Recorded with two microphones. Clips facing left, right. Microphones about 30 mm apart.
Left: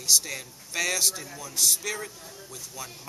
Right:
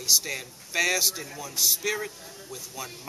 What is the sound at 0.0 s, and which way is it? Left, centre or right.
Speech, centre.